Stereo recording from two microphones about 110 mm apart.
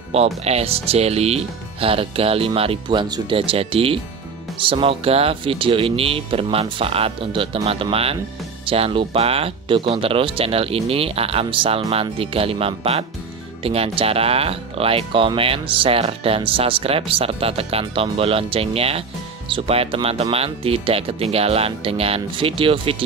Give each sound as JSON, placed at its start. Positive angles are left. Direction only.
{"t": 0.1, "sound": "speech", "side_deg": -70}